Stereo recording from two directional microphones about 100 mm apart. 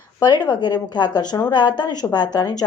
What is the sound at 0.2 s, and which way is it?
A woman's voice, 45° left (ahead or behind).